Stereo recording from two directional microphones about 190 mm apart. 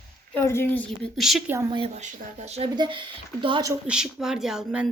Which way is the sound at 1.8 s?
35° right (ahead or behind).